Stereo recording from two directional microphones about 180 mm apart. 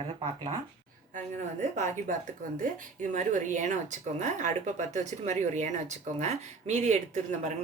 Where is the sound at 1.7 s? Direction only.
40° right (ahead or behind).